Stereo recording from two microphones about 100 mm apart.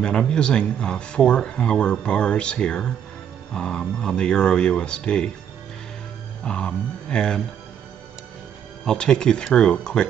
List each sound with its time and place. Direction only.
0.0 s speech: 10° left (ahead or behind)
6.4 s speech: 10° left (ahead or behind)
8.8 s speech: 10° left (ahead or behind)